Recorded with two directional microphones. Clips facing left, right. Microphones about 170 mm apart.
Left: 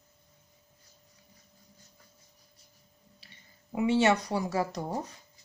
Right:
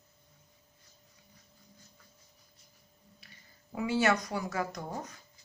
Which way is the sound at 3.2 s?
30° left (ahead or behind).